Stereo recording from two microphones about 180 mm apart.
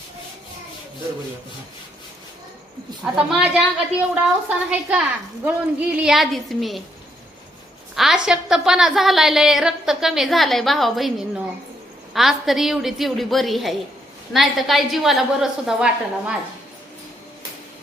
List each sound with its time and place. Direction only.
3.0 s a woman's voice: 5° right (ahead or behind)
7.9 s a woman's voice: 5° right (ahead or behind)